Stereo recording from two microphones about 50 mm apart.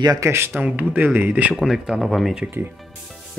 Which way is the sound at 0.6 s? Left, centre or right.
Right.